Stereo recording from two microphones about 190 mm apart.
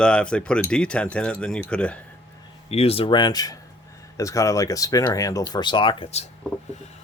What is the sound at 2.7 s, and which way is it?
Speech, 30° left (ahead or behind).